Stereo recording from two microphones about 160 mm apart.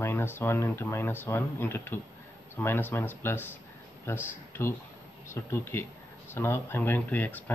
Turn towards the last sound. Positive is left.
turn(degrees=10)  # may be behind; listen again after turning